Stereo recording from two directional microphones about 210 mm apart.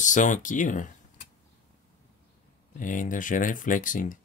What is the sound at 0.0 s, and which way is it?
Speech, 35° left (ahead or behind).